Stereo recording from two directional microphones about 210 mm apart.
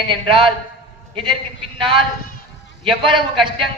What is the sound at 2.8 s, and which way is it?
Speech, 25° right (ahead or behind).